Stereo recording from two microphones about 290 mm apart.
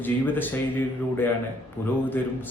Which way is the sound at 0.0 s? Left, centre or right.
Centre.